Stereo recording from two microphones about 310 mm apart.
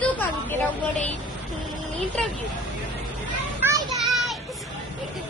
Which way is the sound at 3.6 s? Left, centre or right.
Centre.